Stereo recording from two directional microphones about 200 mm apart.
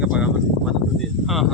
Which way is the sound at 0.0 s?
5° right (ahead or behind).